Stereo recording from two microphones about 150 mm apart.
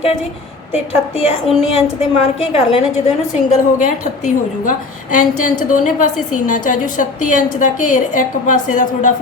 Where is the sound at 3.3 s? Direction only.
55° left (ahead or behind).